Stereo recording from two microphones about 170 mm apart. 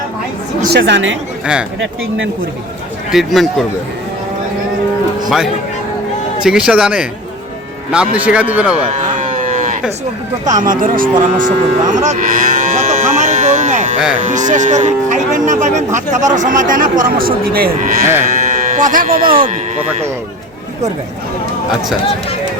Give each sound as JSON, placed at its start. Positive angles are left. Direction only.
{"t": 0.7, "sound": "speech", "side_deg": -90}
{"t": 3.1, "sound": "speech", "side_deg": 0}
{"t": 6.4, "sound": "speech", "side_deg": -5}
{"t": 8.9, "sound": "cattle", "side_deg": -45}
{"t": 10.4, "sound": "speech", "side_deg": -50}
{"t": 11.3, "sound": "cattle", "side_deg": -50}
{"t": 14.2, "sound": "speech", "side_deg": -45}
{"t": 19.3, "sound": "speech", "side_deg": -35}